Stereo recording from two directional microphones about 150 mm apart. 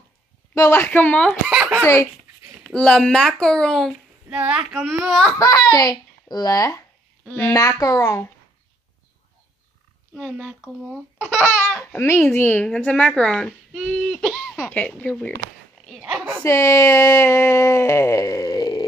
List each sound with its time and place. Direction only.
0.6 s speech: 15° left (ahead or behind)
1.5 s a sound: 10° right (ahead or behind)
2.6 s speech: 5° left (ahead or behind)
4.3 s speech: 10° right (ahead or behind)
5.4 s speech: 25° left (ahead or behind)
7.2 s speech: 10° left (ahead or behind)
7.5 s speech: 20° left (ahead or behind)
10.1 s speech: centre (ahead or behind)
11.9 s speech: 15° left (ahead or behind); by 14.7 s centre (ahead or behind)
14.7 s speech: 10° left (ahead or behind)
16.0 s speech: 5° right (ahead or behind)
16.4 s speech: 20° left (ahead or behind)